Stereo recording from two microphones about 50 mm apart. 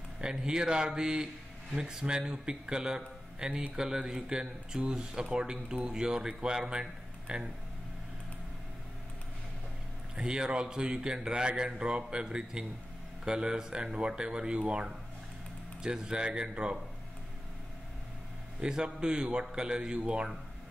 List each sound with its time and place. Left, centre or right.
0.2 s speech: centre
10.1 s a man's voice: centre
18.6 s a man's voice: centre